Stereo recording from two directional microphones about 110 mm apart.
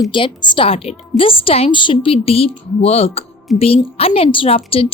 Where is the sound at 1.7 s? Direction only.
45° left (ahead or behind).